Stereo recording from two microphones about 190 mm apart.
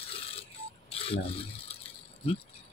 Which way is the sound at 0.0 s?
30° left (ahead or behind).